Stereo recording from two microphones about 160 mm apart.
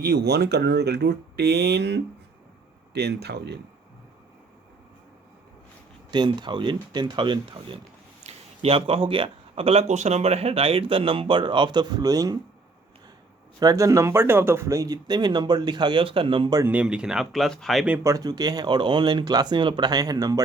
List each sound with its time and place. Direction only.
0.0 s speech: 85° right
6.1 s a man's voice: 25° right (ahead or behind)
13.6 s speech: 20° right (ahead or behind)
16.6 s speech: 10° right (ahead or behind)
18.0 s speech: 20° right (ahead or behind)